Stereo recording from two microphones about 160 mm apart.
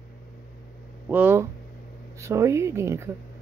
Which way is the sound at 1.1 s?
10° right (ahead or behind).